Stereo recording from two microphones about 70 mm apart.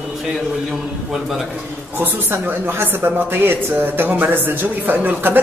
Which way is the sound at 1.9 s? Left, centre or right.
Right.